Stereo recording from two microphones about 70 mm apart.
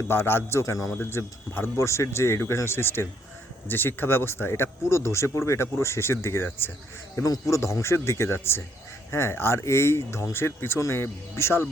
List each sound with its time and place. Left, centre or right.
0.1 s speech: left
0.6 s a man's voice: left
1.1 s speech: left
7.3 s speech: left